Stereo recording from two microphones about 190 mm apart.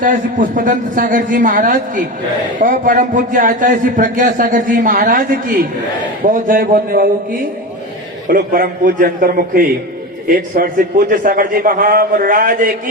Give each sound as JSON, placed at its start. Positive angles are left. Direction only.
{"t": 0.0, "sound": "a man's voice", "side_deg": -45}
{"t": 8.3, "sound": "a man's voice", "side_deg": -50}